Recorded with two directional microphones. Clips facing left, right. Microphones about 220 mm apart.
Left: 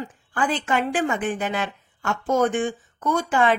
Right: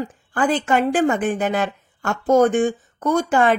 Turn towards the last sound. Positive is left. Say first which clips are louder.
# right 4 dB
turn(degrees=-45)  # may be behind; listen again after turning